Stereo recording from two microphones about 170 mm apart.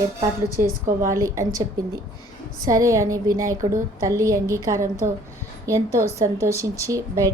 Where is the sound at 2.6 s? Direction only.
20° right (ahead or behind).